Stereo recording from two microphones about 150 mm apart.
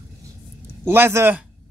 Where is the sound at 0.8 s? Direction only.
15° right (ahead or behind).